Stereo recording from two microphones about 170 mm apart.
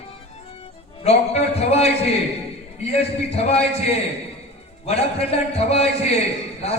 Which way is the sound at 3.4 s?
35° left (ahead or behind).